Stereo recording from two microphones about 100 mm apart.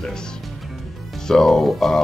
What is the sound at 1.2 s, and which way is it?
Speech, 5° left (ahead or behind).